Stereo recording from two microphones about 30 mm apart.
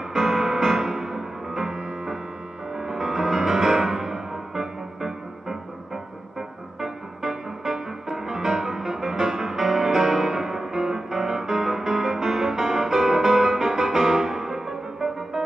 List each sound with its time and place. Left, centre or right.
0.1 s music: centre
6.8 s music: centre